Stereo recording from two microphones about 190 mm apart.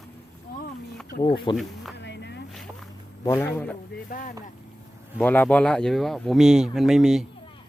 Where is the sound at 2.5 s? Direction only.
Centre (ahead or behind).